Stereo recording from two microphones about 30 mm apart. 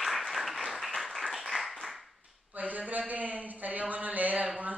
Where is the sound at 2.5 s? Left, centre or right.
Right.